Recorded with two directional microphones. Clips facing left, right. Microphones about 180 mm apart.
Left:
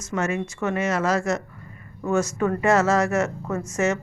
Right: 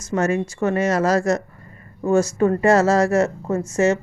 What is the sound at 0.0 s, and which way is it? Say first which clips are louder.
A woman's voice: right 5 dB; 35° right (ahead or behind).